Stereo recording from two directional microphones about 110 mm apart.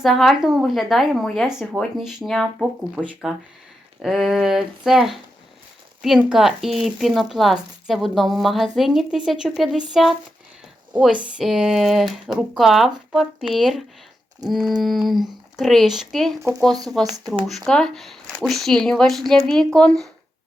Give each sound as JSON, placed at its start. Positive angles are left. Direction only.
{"t": 0.0, "sound": "speech", "side_deg": 0}
{"t": 2.6, "sound": "speech", "side_deg": -10}
{"t": 14.4, "sound": "a sound", "side_deg": -35}
{"t": 14.8, "sound": "speech", "side_deg": 0}